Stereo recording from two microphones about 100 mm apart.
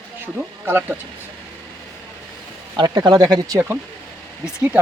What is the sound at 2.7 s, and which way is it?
Speech, 45° right (ahead or behind).